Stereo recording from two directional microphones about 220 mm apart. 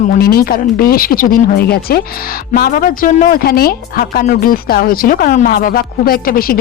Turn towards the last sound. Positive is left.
turn(degrees=40)  # may be behind; listen again after turning